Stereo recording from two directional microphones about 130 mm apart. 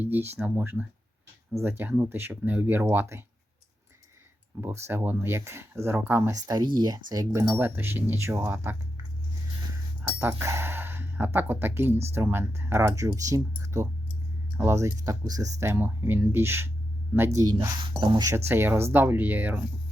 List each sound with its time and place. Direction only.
0.0 s speech: 15° right (ahead or behind)
4.5 s speech: 20° right (ahead or behind)
6.4 s speech: 30° right (ahead or behind)
10.0 s speech: 15° right (ahead or behind)
13.6 s a sound: 20° right (ahead or behind)
14.5 s speech: 20° right (ahead or behind)